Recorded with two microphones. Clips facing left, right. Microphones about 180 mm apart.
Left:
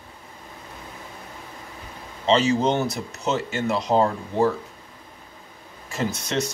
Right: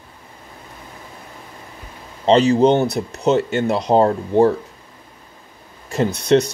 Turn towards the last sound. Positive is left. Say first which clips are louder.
# right 10 dB
turn(degrees=-35)  # may be behind; listen again after turning